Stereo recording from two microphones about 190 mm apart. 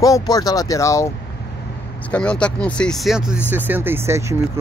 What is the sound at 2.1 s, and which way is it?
Speech, 5° left (ahead or behind).